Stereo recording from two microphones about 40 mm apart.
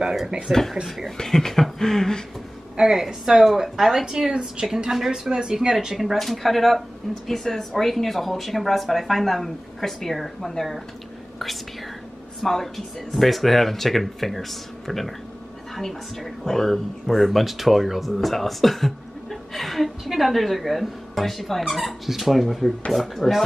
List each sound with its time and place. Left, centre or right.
0.5 s a woman's voice: centre
2.8 s speech: centre
5.9 s a woman's voice: centre
12.4 s a woman's voice: centre